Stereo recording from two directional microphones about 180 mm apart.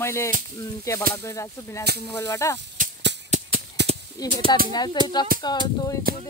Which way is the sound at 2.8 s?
45° right (ahead or behind).